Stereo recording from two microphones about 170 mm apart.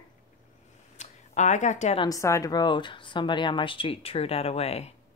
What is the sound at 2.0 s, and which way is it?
Speech, 20° left (ahead or behind).